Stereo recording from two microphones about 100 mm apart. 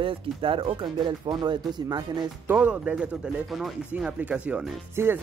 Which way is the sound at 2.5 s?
15° right (ahead or behind).